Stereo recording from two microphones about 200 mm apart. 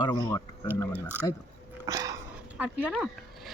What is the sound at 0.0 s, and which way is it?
Speech, 20° left (ahead or behind).